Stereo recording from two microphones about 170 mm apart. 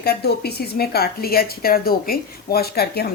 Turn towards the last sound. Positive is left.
turn(degrees=65)  # may be behind; listen again after turning